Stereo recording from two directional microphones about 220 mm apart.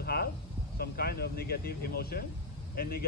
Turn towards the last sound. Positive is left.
turn(degrees=45)  # may be behind; listen again after turning